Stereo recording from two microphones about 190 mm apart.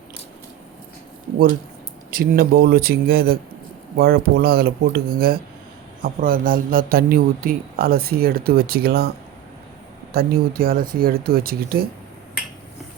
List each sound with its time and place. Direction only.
2.0 s a man's voice: 50° right (ahead or behind)